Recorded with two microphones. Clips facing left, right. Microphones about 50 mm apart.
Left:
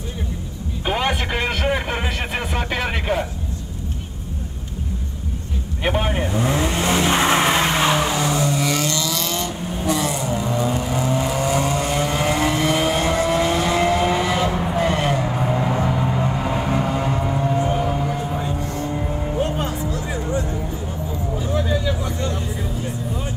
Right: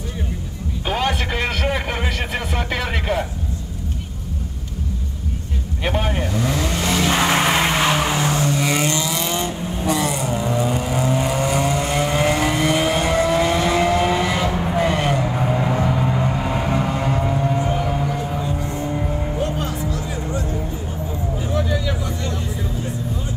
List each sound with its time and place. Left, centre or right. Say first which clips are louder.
0.8 s a sound: even; left
5.9 s vehicle: left 1 dB; left
7.5 s vehicle: even; right
8.5 s vehicle: right 1 dB; right
9.8 s vehicle: right 1 dB; centre
10.4 s vehicle: right 2 dB; centre
11.0 s vehicle: right 2 dB; right; by 15.8 s centre
15.9 s music: right 1 dB; centre
17.2 s vehicle: right 1 dB; centre
17.8 s music: even; centre
18.9 s vehicle: right 1 dB; centre
19.4 s music: even; left